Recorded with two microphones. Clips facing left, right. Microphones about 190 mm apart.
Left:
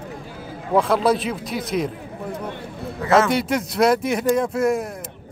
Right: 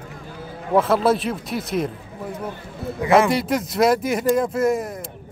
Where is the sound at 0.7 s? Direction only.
Centre (ahead or behind).